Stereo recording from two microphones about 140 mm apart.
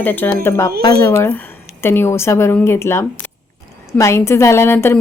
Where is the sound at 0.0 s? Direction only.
15° left (ahead or behind).